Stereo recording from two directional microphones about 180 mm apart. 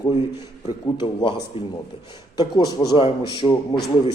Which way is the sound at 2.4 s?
25° left (ahead or behind).